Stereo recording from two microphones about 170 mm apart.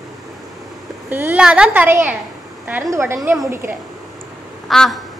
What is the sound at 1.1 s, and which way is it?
Speech, 10° right (ahead or behind).